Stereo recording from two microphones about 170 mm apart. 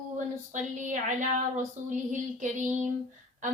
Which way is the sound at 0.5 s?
50° right (ahead or behind).